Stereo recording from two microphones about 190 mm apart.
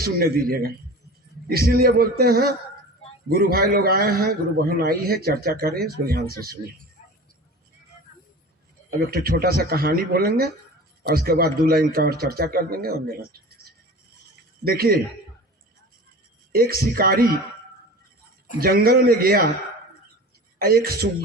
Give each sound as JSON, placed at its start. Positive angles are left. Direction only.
{"t": 0.0, "sound": "a man's voice", "side_deg": -50}
{"t": 9.0, "sound": "a man's voice", "side_deg": -50}
{"t": 14.6, "sound": "a man's voice", "side_deg": -50}
{"t": 16.5, "sound": "a man's voice", "side_deg": -50}
{"t": 18.6, "sound": "a man's voice", "side_deg": -50}
{"t": 20.6, "sound": "a man's voice", "side_deg": -50}